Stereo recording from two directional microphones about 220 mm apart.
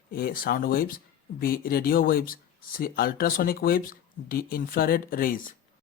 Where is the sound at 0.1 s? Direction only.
40° left (ahead or behind).